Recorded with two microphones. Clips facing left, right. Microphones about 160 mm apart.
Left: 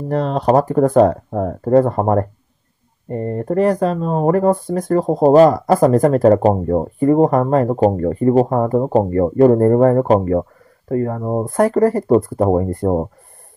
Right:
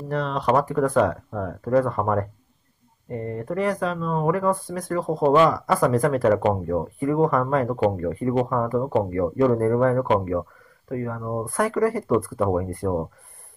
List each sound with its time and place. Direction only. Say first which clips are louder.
0.1 s speech: left 7 dB; 40° left (ahead or behind)